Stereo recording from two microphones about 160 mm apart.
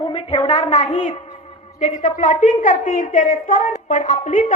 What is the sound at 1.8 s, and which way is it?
A woman's voice, 50° left (ahead or behind).